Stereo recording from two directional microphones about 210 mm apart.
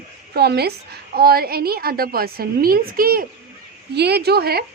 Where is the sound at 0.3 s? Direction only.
50° right (ahead or behind).